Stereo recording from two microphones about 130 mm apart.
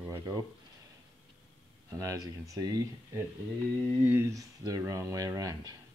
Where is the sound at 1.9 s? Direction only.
25° right (ahead or behind).